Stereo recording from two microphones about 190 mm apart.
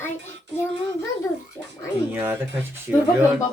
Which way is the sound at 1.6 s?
15° left (ahead or behind).